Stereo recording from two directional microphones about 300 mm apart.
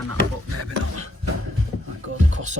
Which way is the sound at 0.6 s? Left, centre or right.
Right.